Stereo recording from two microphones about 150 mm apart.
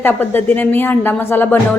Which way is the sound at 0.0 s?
10° left (ahead or behind).